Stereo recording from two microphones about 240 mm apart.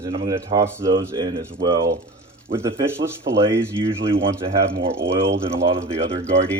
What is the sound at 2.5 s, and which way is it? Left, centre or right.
A man's voice, centre.